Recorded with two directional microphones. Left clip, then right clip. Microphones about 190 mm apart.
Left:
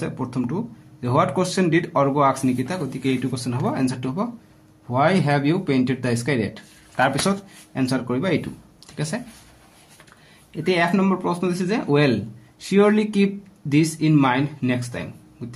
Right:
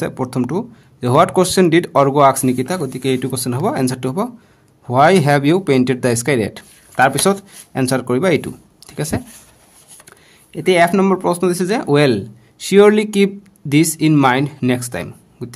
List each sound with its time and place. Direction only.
0.0 s speech: 50° right (ahead or behind)
10.5 s speech: 45° right (ahead or behind)